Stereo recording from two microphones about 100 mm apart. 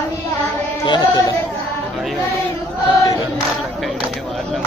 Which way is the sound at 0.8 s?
50° left (ahead or behind).